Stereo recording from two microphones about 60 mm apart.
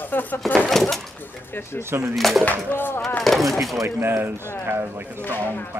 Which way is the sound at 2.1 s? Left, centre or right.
Centre.